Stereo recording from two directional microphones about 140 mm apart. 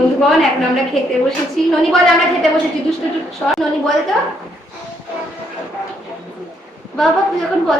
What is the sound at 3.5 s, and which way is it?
Speech, centre (ahead or behind).